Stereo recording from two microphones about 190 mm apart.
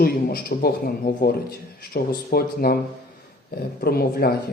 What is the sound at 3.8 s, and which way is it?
Speech, 55° left (ahead or behind).